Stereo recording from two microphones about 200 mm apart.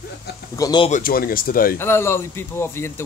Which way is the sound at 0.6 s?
20° left (ahead or behind).